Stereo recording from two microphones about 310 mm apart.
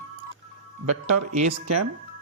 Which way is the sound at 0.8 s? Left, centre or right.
Right.